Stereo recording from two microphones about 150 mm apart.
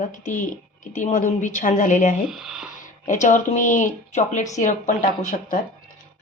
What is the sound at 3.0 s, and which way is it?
Speech, 55° left (ahead or behind).